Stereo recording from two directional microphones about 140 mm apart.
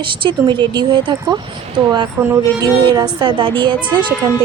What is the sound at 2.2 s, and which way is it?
Speech, 20° right (ahead or behind).